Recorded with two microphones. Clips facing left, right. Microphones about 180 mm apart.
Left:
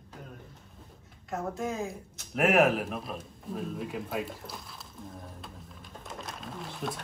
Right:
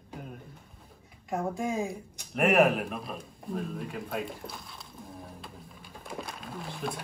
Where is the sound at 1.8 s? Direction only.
Centre (ahead or behind).